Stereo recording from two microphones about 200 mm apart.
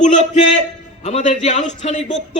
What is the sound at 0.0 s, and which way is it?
A man's voice, 35° left (ahead or behind).